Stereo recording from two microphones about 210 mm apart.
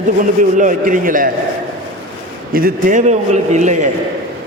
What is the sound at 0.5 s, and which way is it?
Speech, 40° right (ahead or behind).